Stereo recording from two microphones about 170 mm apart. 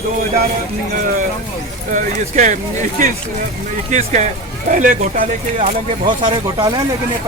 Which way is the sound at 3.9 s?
45° right (ahead or behind).